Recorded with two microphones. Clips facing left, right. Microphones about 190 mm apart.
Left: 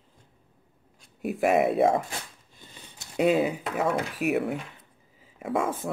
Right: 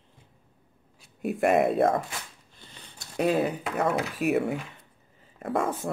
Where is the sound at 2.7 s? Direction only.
15° left (ahead or behind).